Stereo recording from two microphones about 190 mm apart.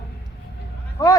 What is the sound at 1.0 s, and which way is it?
Speech, 20° left (ahead or behind).